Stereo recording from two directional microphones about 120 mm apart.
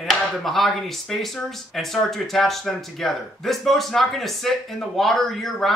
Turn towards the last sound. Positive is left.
turn(degrees=5)  # may be behind; listen again after turning